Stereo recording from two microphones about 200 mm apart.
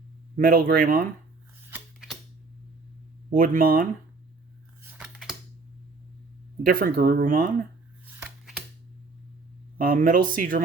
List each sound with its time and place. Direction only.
0.3 s speech: 45° right (ahead or behind)
1.7 s a sound: 5° right (ahead or behind)
3.3 s speech: 45° right (ahead or behind)
4.8 s scissors: 10° right (ahead or behind)
6.6 s speech: 45° right (ahead or behind)
9.7 s speech: 45° right (ahead or behind)